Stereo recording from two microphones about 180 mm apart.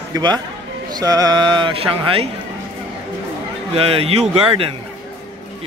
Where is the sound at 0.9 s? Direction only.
20° right (ahead or behind).